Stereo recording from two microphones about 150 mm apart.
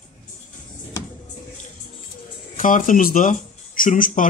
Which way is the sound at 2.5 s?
60° left (ahead or behind).